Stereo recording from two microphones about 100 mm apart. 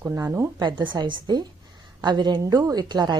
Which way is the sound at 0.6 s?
50° right (ahead or behind).